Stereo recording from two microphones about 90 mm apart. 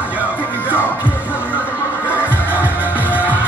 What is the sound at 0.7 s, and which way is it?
Music, 20° left (ahead or behind).